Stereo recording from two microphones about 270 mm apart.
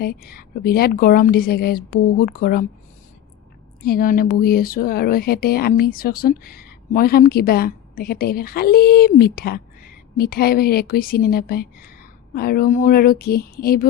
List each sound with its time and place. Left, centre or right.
0.0 s speech: left
3.8 s speech: left